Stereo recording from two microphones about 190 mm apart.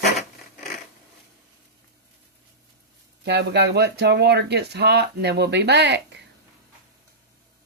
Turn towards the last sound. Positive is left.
turn(degrees=-60)  # may be behind; listen again after turning